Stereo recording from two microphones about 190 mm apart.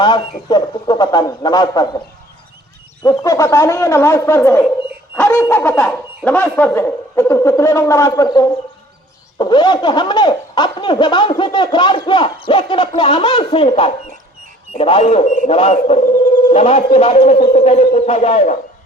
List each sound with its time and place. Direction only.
0.0 s speech: 25° left (ahead or behind)
3.0 s speech: 20° left (ahead or behind); by 18.5 s 35° left (ahead or behind)